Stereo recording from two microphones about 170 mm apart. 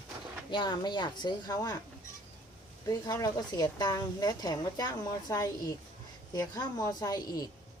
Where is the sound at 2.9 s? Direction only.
20° left (ahead or behind).